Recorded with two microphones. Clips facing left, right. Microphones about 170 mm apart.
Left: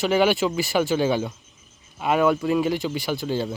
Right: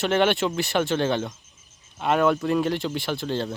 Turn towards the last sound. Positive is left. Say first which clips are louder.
# left 2 dB
turn(degrees=5)  # may be behind; listen again after turning